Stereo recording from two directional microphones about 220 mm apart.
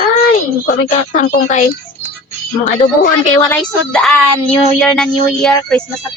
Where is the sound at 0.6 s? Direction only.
40° left (ahead or behind).